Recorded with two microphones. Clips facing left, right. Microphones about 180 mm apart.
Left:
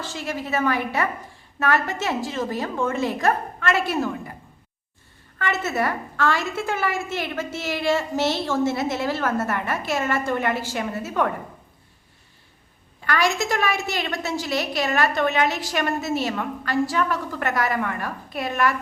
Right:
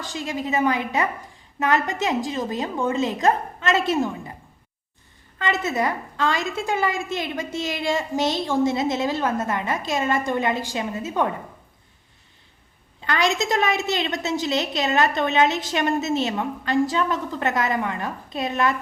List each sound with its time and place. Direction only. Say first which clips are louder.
0.0 s a woman's voice: right 1 dB; 15° right (ahead or behind)
5.4 s a woman's voice: right 1 dB; 15° right (ahead or behind)
13.0 s a woman's voice: even; 20° right (ahead or behind)